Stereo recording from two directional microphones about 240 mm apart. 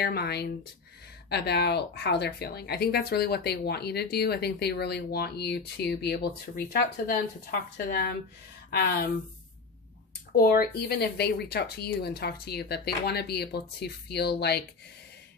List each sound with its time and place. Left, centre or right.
0.0 s speech: left
10.3 s speech: left